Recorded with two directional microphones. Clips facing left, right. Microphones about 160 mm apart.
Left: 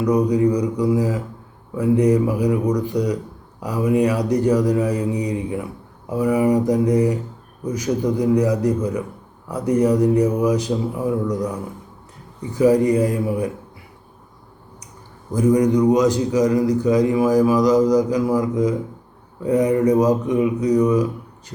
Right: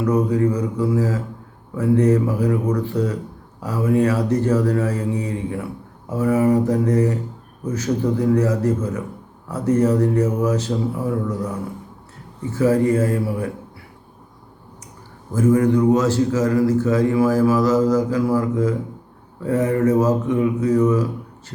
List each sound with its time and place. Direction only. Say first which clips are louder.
0.0 s a man's voice: left 1 dB; 15° left (ahead or behind)
15.3 s a man's voice: even; 15° left (ahead or behind)